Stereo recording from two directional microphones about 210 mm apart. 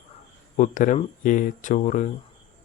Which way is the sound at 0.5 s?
35° left (ahead or behind).